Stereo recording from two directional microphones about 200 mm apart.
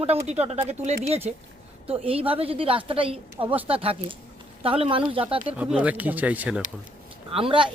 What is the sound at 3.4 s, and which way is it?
Speech, 10° right (ahead or behind).